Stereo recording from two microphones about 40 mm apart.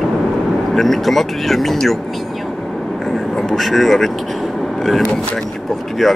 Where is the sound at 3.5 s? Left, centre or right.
Centre.